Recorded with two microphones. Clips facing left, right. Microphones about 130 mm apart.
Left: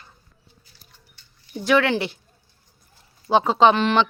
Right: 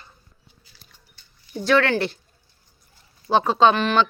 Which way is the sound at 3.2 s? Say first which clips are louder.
Left 1 dB; 15° left (ahead or behind).